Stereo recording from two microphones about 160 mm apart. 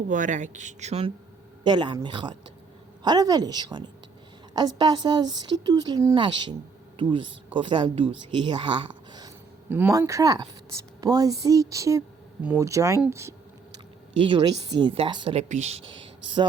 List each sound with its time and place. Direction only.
0.1 s speech: 50° right (ahead or behind)
1.6 s a woman's voice: 30° right (ahead or behind)
9.6 s a woman's voice: 10° right (ahead or behind)
12.4 s speech: 10° right (ahead or behind)
12.6 s a woman's voice: 20° right (ahead or behind)
14.2 s speech: 30° right (ahead or behind)
15.4 s speech: 45° right (ahead or behind)